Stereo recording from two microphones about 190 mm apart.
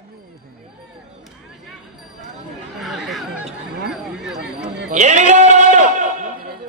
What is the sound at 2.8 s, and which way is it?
Chatter, centre (ahead or behind).